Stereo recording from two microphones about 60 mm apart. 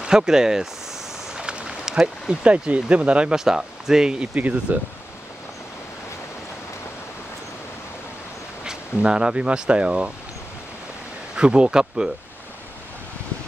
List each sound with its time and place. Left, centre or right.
0.0 s speech: centre
4.3 s speech: right
8.6 s speech: centre
11.3 s speech: centre